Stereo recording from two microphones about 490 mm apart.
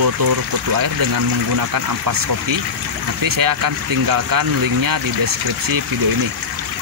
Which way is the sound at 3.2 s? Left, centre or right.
Right.